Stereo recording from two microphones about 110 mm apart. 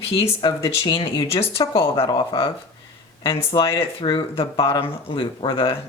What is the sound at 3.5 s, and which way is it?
Speech, 40° left (ahead or behind).